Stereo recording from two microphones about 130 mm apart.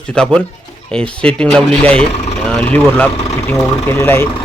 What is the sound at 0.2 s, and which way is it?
Speech, 5° left (ahead or behind).